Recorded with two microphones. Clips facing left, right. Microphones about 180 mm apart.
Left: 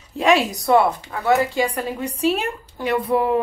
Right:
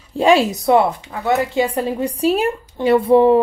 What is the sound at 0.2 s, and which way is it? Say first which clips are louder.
Speech: right 4 dB; 30° right (ahead or behind).